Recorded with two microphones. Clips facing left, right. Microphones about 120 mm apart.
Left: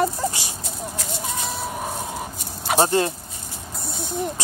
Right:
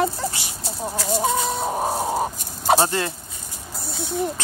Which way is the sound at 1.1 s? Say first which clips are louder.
Right 11 dB; 35° right (ahead or behind).